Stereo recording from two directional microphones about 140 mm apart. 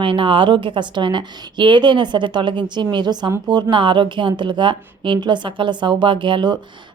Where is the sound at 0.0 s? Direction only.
40° right (ahead or behind).